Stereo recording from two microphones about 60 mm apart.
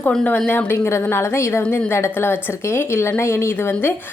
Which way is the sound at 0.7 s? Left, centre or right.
Left.